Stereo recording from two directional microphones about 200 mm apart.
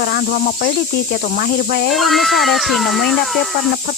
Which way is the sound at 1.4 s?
50° left (ahead or behind).